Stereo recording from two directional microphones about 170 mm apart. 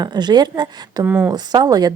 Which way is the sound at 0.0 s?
25° right (ahead or behind).